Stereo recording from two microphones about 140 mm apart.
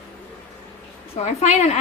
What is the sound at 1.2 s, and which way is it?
Speech, 50° left (ahead or behind).